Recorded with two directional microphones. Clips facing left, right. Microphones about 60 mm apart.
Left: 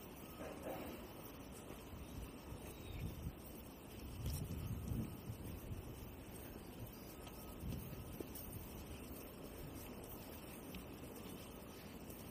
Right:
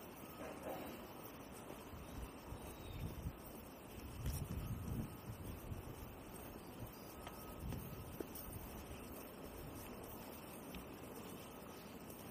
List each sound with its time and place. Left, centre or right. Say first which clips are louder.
0.4 s vehicle: even; right